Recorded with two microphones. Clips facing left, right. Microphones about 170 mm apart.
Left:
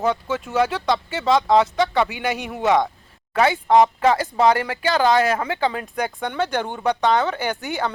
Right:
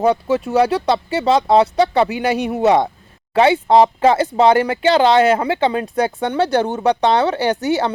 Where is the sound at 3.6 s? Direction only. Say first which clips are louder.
Right 3 dB; 30° right (ahead or behind).